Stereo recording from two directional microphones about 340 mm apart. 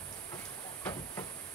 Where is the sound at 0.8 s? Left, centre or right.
Centre.